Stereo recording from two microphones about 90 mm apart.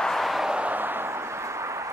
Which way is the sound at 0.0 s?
Centre (ahead or behind).